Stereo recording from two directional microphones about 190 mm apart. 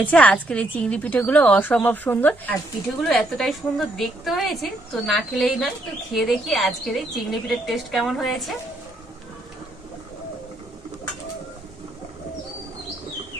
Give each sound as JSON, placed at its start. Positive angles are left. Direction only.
{"t": 0.0, "sound": "a woman's voice", "side_deg": 10}